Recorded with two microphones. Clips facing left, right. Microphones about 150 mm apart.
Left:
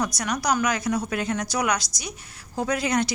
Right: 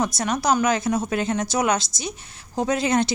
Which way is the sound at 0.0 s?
25° right (ahead or behind).